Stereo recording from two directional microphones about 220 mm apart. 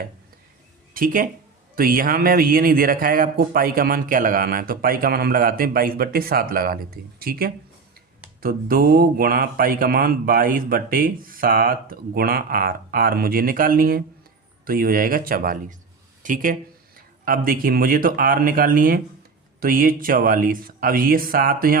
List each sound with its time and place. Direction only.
0.9 s a man's voice: 40° right (ahead or behind)